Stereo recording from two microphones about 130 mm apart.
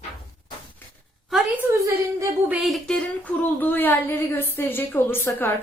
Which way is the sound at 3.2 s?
15° left (ahead or behind).